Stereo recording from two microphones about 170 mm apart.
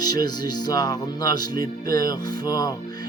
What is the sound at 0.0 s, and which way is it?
Speech, 25° left (ahead or behind).